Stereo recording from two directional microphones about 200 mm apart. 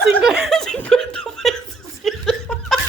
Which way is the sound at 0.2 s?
5° right (ahead or behind).